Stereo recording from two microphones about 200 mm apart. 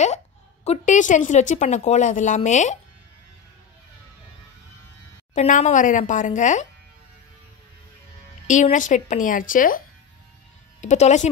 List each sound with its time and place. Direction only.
0.7 s a woman's voice: 40° left (ahead or behind)
5.3 s a woman's voice: 35° left (ahead or behind)
8.5 s a woman's voice: 40° left (ahead or behind)